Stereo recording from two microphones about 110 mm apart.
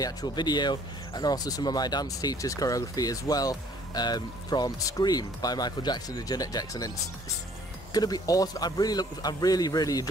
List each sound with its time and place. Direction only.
0.0 s speech: 40° left (ahead or behind)
7.9 s speech: 35° left (ahead or behind)